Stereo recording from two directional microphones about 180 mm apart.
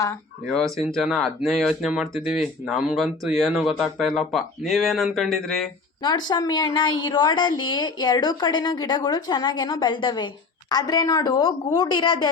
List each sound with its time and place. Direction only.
0.9 s speech: centre (ahead or behind)
6.0 s a woman's voice: 25° left (ahead or behind)